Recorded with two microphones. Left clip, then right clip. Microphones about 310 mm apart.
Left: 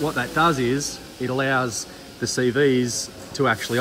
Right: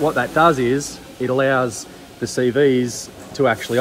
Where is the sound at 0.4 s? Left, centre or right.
Centre.